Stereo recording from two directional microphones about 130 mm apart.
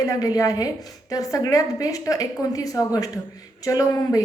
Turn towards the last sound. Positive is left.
turn(degrees=25)  # may be behind; listen again after turning